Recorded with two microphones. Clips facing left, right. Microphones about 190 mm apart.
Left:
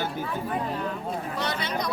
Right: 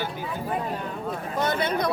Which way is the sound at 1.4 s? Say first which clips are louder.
Right 8 dB; 50° right (ahead or behind).